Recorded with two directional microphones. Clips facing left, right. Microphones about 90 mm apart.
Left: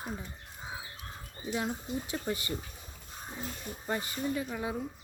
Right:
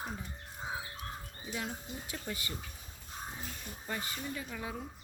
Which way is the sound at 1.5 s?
25° left (ahead or behind).